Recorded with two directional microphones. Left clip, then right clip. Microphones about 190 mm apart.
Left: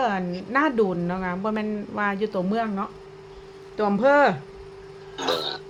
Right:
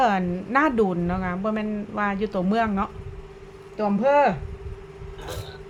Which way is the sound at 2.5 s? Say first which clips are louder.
Right 3 dB; 15° right (ahead or behind).